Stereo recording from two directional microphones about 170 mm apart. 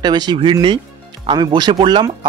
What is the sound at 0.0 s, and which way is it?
Speech, 25° right (ahead or behind).